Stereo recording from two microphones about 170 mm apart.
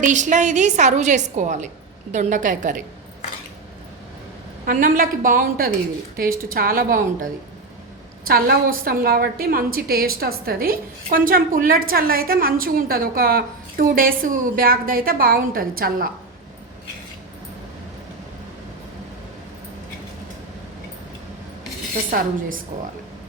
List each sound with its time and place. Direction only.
0.0 s a woman's voice: 45° right (ahead or behind)
4.6 s a woman's voice: 55° right (ahead or behind)
8.3 s a woman's voice: 60° right (ahead or behind)
22.1 s a woman's voice: 55° right (ahead or behind)